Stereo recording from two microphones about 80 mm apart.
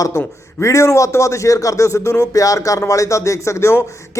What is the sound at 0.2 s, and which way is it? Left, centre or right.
A man's voice, left.